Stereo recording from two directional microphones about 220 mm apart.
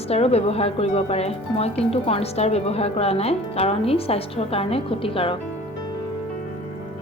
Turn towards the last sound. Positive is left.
turn(degrees=25)  # may be behind; listen again after turning